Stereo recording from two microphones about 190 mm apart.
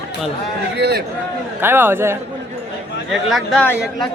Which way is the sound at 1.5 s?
10° right (ahead or behind).